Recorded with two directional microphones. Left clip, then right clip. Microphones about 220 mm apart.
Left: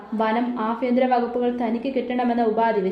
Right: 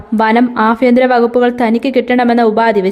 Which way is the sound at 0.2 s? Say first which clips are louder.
Right 12 dB; 45° right (ahead or behind).